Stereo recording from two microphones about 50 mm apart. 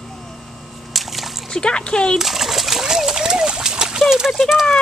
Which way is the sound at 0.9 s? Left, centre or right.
Centre.